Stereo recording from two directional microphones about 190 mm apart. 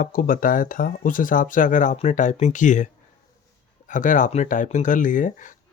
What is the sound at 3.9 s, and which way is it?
Speech, 40° left (ahead or behind).